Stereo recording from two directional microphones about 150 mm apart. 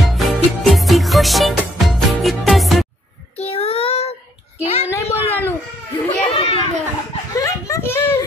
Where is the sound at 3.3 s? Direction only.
40° left (ahead or behind).